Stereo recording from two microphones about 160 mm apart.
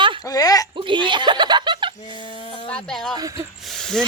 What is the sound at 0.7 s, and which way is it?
Speech, 30° right (ahead or behind).